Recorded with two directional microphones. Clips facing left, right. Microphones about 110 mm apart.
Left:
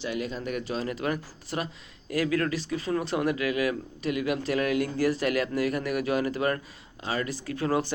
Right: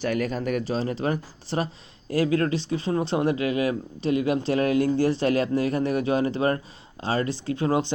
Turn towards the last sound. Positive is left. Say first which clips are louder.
# right 3 dB
turn(degrees=-20)  # may be behind; listen again after turning